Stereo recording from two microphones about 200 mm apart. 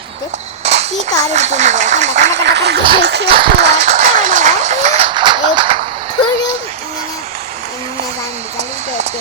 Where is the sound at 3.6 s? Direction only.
35° right (ahead or behind).